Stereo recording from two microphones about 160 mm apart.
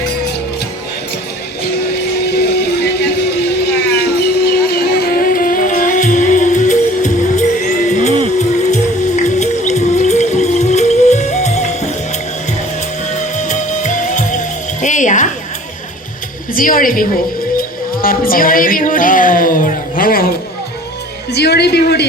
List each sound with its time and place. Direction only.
2.2 s music: 90° left
3.8 s a sound: 90° left; by 7.4 s 50° left (ahead or behind)
8.4 s music: 45° left (ahead or behind)
13.1 s music: 50° left (ahead or behind)
16.6 s a sound: 60° left (ahead or behind)
21.3 s music: 90° left